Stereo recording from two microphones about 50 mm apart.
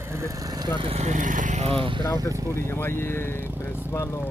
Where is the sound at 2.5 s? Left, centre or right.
Left.